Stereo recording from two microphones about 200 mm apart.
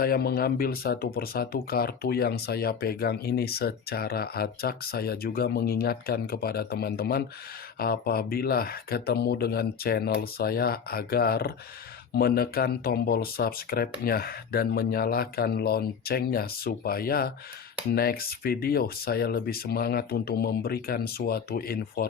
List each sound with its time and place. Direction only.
0.0 s speech: 50° left (ahead or behind)